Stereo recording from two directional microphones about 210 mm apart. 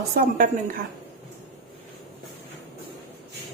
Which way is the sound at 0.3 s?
40° right (ahead or behind).